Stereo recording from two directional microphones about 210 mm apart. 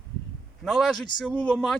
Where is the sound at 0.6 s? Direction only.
Centre (ahead or behind).